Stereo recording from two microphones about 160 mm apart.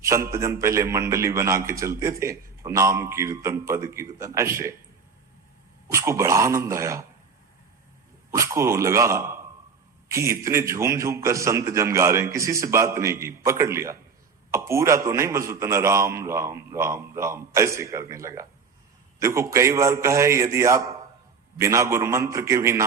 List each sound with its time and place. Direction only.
0.0 s a man's voice: 20° right (ahead or behind)
5.9 s a man's voice: 15° right (ahead or behind)
8.3 s a man's voice: 15° right (ahead or behind)